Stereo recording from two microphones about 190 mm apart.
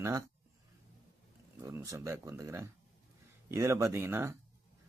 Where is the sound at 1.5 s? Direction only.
15° right (ahead or behind).